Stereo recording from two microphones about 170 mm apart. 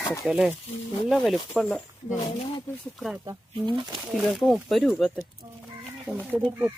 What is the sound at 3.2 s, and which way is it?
Speech, 25° right (ahead or behind).